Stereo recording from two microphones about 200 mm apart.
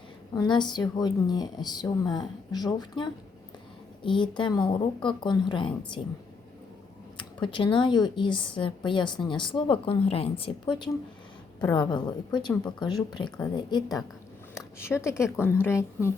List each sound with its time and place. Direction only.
0.3 s a woman's voice: 20° left (ahead or behind)
7.2 s a woman's voice: 25° left (ahead or behind)